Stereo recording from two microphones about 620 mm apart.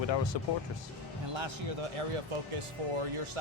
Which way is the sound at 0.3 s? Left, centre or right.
Left.